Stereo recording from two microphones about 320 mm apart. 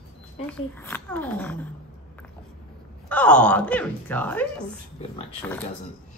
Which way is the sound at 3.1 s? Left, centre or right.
Centre.